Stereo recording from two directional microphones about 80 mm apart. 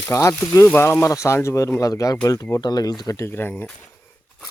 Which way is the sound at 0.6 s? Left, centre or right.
Left.